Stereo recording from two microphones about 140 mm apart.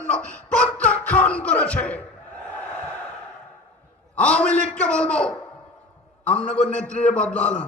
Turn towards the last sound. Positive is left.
turn(degrees=10)  # may be behind; listen again after turning